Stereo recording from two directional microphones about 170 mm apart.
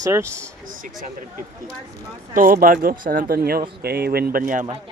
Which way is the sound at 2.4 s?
55° right (ahead or behind).